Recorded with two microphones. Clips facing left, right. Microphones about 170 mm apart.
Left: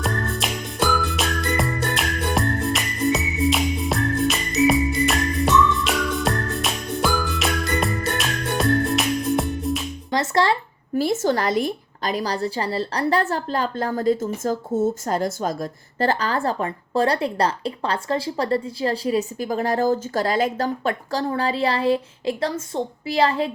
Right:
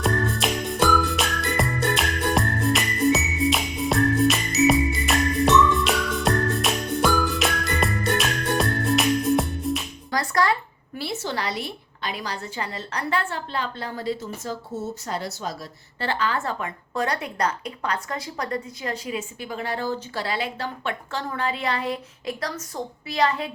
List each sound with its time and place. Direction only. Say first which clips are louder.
0.0 s music: right 2 dB; centre (ahead or behind)
10.1 s music: left 3 dB; 25° left (ahead or behind)
10.9 s a woman's voice: left 9 dB; 45° left (ahead or behind); by 23.5 s 30° left (ahead or behind)